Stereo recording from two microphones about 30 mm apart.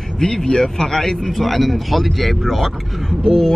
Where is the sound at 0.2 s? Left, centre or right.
Centre.